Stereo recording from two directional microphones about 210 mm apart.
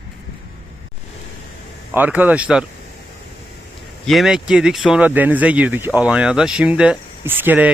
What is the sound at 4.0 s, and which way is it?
Speech, centre (ahead or behind).